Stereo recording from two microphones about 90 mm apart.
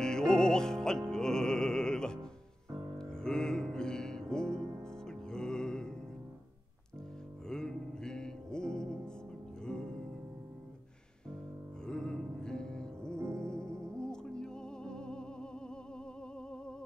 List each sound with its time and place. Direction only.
0.0 s music: 10° left (ahead or behind)
7.4 s music: 5° left (ahead or behind)
11.8 s music: 10° left (ahead or behind)
13.2 s music: 30° right (ahead or behind)
13.5 s music: 10° left (ahead or behind)